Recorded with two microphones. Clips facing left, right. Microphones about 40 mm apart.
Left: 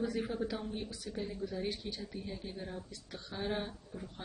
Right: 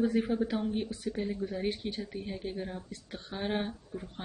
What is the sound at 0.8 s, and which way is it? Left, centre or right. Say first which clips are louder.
Speech: right 7 dB; right.